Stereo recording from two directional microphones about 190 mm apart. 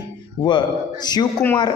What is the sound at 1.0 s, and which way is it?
Speech, 20° left (ahead or behind).